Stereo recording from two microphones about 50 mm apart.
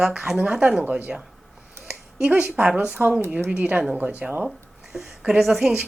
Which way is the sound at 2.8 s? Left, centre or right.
Right.